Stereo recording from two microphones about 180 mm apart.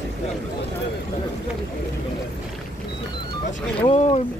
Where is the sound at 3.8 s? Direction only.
35° left (ahead or behind).